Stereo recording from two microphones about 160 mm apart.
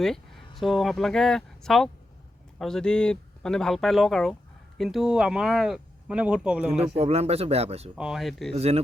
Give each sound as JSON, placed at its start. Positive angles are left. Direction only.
{"t": 0.0, "sound": "speech", "side_deg": 0}
{"t": 6.9, "sound": "speech", "side_deg": -40}
{"t": 7.9, "sound": "speech", "side_deg": -5}
{"t": 8.5, "sound": "speech", "side_deg": -40}